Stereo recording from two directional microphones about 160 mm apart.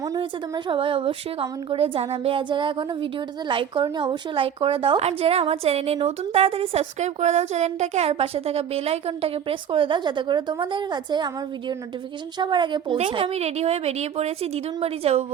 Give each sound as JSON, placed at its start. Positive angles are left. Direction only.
{"t": 0.0, "sound": "a woman's voice", "side_deg": -25}
{"t": 12.4, "sound": "a woman's voice", "side_deg": -30}